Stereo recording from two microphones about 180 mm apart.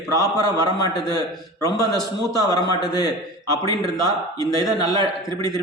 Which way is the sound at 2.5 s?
20° left (ahead or behind).